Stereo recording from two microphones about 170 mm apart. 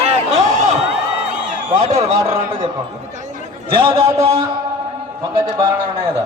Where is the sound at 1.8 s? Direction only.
35° right (ahead or behind).